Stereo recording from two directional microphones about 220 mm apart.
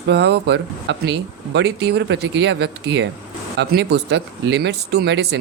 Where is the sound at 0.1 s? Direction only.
50° right (ahead or behind).